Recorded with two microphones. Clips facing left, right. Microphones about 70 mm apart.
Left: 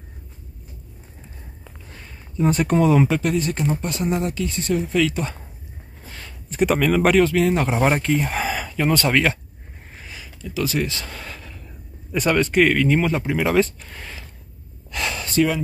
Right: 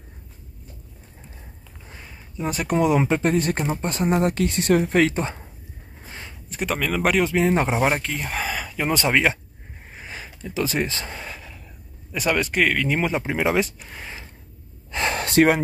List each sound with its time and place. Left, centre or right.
1.9 s a sound: centre
3.0 s speech: right
3.3 s speech: right
5.1 s speech: right
6.0 s a sound: right
6.5 s speech: centre
7.2 s speech: right
7.8 s speech: centre
8.9 s speech: centre
10.0 s speech: right; by 14.2 s centre
14.9 s gasp: right
15.1 s speech: right